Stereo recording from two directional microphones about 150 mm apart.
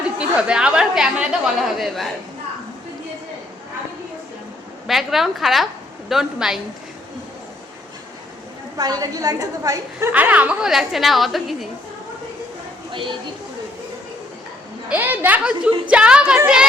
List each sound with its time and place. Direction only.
0.2 s a woman's voice: 5° right (ahead or behind)
4.9 s a woman's voice: centre (ahead or behind)
8.8 s a woman's voice: 25° right (ahead or behind)
10.1 s a woman's voice: 10° right (ahead or behind)
14.8 s a woman's voice: 10° right (ahead or behind)